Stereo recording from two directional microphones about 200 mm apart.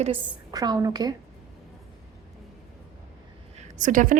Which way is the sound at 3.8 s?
40° right (ahead or behind).